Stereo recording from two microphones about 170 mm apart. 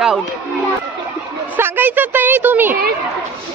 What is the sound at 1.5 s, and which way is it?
Speech, 10° right (ahead or behind).